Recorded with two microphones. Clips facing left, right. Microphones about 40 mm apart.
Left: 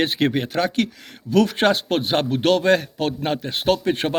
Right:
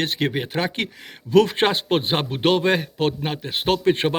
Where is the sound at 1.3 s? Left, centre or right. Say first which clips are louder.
Right 1 dB; right.